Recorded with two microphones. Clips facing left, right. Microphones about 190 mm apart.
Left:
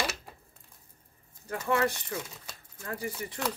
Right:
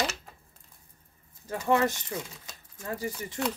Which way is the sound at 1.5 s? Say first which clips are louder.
Right 3 dB; 25° right (ahead or behind).